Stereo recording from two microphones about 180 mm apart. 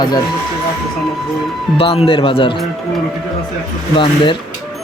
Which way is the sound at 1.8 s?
30° left (ahead or behind).